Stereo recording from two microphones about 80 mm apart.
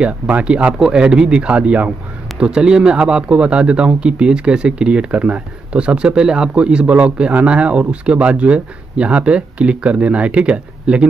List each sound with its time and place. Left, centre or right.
0.0 s a man's voice: centre